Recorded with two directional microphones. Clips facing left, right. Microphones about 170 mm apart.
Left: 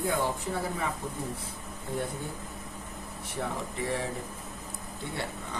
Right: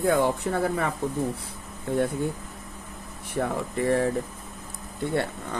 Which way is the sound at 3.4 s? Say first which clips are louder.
Right 7 dB; 55° right (ahead or behind).